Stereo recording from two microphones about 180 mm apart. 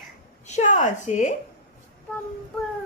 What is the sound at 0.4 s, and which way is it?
Speech, 40° left (ahead or behind).